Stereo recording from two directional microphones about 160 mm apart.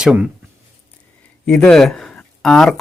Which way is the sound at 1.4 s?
5° left (ahead or behind).